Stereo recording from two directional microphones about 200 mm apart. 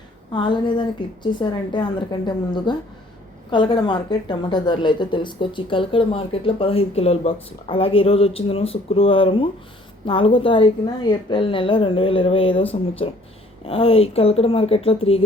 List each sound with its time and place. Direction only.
0.3 s a woman's voice: 25° left (ahead or behind)